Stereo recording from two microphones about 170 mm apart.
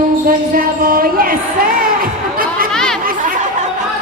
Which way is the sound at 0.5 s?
60° right (ahead or behind).